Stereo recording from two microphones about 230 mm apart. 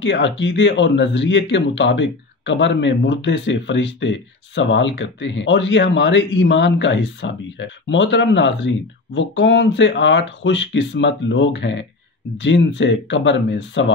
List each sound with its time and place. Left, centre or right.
0.0 s speech: left